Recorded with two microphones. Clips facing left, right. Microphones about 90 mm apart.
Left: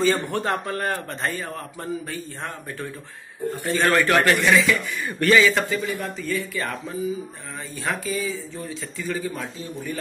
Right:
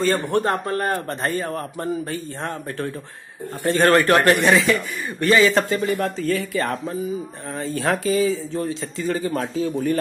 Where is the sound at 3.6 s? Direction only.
50° right (ahead or behind).